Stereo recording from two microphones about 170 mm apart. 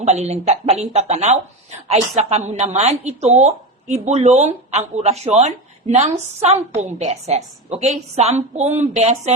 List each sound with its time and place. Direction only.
0.0 s a woman's voice: 40° right (ahead or behind)